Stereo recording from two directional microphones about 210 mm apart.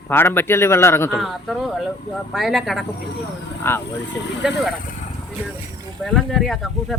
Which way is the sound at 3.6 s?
10° left (ahead or behind).